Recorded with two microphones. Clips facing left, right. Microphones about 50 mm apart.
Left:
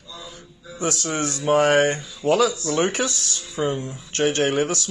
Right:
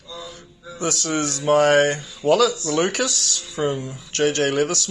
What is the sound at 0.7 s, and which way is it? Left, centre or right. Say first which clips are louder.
Speech: right 1 dB; left.